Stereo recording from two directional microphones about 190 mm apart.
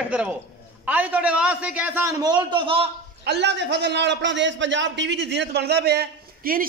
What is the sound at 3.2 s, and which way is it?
A man's voice, 60° right (ahead or behind).